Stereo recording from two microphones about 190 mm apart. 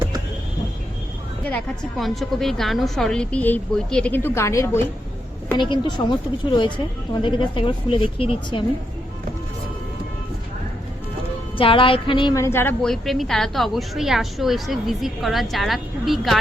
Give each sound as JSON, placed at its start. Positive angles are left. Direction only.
{"t": 1.5, "sound": "a woman's voice", "side_deg": 5}
{"t": 5.5, "sound": "speech", "side_deg": 25}
{"t": 11.5, "sound": "a woman's voice", "side_deg": 25}